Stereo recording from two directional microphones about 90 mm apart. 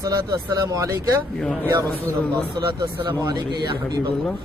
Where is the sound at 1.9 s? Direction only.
20° left (ahead or behind).